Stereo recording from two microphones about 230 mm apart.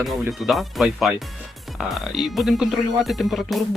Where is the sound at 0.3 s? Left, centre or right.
Centre.